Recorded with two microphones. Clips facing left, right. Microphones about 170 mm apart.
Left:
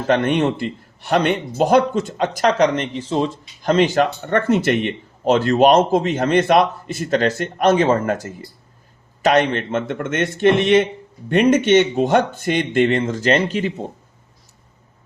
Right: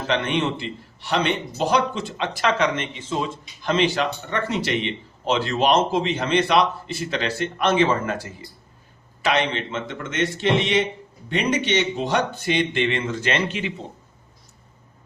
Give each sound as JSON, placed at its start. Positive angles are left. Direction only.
{"t": 0.1, "sound": "a man's voice", "side_deg": 50}